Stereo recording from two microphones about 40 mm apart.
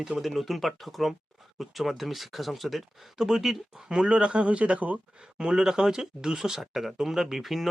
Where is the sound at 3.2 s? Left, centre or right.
Centre.